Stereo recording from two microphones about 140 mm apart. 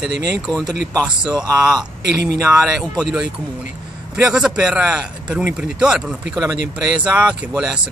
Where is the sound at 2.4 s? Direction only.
5° right (ahead or behind).